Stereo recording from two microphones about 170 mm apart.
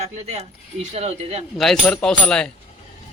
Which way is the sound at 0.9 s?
40° right (ahead or behind).